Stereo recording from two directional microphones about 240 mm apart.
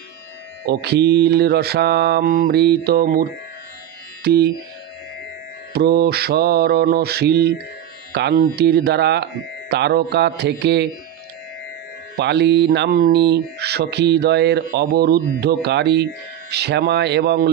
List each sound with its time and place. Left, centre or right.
0.7 s speech: right
4.2 s a sound: right
5.7 s mantra: right
8.1 s speech: right
12.2 s speech: right